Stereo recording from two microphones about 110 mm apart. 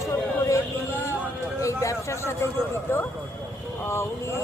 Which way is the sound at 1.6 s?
30° left (ahead or behind).